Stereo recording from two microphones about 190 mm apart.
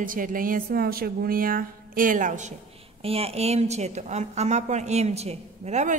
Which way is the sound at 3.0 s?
30° right (ahead or behind).